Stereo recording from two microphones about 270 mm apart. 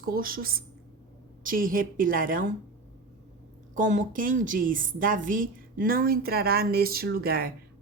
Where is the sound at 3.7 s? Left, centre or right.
Right.